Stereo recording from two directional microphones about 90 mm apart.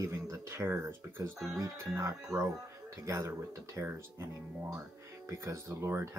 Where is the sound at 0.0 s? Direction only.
35° right (ahead or behind).